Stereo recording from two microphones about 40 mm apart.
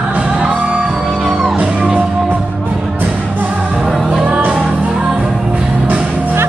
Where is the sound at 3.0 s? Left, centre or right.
Right.